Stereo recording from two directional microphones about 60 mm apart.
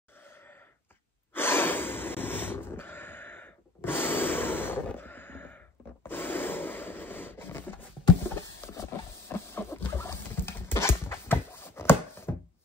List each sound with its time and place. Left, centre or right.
1.3 s gasp: left
4.9 s crow: left
6.0 s rub: left
9.3 s patter: left